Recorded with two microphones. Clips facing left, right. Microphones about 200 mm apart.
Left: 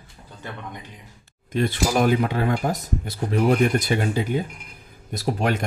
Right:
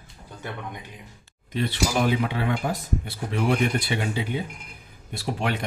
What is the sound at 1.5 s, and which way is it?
Speech, 45° left (ahead or behind).